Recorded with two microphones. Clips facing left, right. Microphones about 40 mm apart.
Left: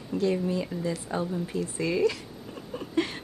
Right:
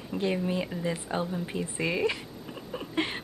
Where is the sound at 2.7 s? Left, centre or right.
Right.